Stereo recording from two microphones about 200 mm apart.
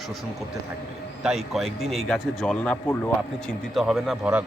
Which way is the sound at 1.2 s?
Centre (ahead or behind).